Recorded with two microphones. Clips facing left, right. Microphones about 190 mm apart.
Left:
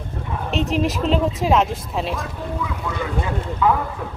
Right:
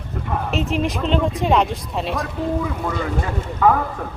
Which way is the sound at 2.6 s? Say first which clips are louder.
Right 3 dB; 50° right (ahead or behind).